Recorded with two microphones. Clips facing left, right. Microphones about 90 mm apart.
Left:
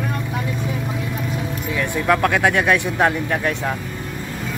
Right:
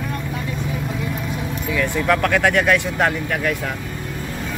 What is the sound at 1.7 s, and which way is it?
Speech, 20° left (ahead or behind).